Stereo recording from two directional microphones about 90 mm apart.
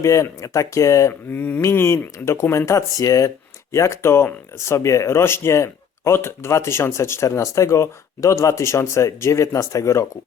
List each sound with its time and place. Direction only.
0.0 s speech: 35° left (ahead or behind)
1.4 s speech: 20° left (ahead or behind)